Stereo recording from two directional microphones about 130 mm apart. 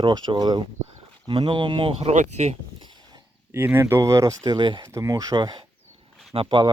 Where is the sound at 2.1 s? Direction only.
65° right (ahead or behind).